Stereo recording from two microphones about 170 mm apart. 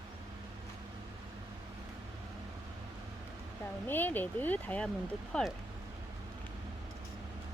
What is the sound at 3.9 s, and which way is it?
Speech, 10° left (ahead or behind).